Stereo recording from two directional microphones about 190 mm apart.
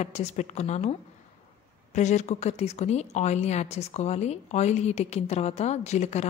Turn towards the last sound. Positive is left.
turn(degrees=35)  # may be behind; listen again after turning